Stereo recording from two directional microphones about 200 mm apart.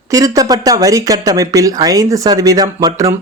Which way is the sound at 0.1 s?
15° right (ahead or behind).